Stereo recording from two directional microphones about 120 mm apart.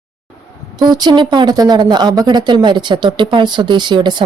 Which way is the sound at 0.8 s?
35° right (ahead or behind).